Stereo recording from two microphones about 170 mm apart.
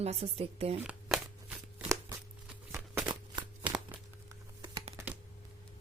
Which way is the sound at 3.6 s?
10° right (ahead or behind).